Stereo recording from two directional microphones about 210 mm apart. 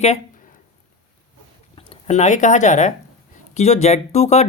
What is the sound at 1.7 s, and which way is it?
Speech, 30° left (ahead or behind).